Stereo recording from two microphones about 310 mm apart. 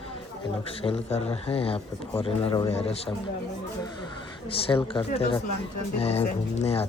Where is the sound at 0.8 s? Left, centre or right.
Centre.